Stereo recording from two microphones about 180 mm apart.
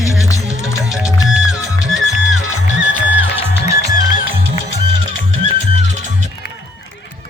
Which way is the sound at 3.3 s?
15° right (ahead or behind).